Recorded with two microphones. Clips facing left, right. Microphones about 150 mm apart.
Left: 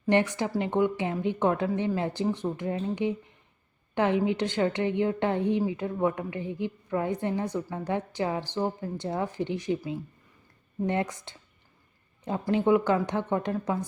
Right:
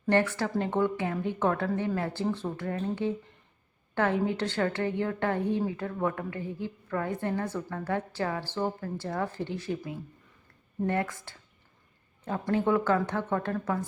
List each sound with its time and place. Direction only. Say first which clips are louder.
0.0 s a woman's voice: left 1 dB; 15° left (ahead or behind)